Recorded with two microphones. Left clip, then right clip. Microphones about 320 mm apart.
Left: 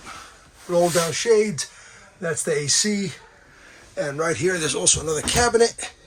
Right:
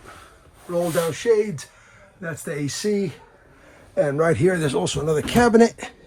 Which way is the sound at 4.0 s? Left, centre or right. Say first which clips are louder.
Right 5 dB; right.